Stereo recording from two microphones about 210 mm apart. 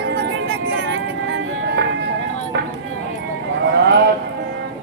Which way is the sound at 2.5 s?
55° right (ahead or behind).